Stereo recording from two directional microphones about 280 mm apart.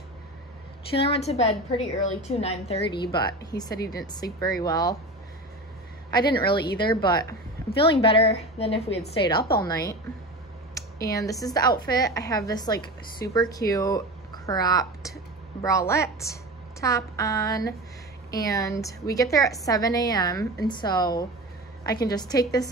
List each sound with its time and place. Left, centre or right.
0.9 s a woman's voice: left
6.0 s a woman's voice: centre